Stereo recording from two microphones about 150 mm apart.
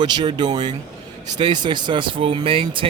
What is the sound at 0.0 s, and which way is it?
A man's voice, 30° right (ahead or behind).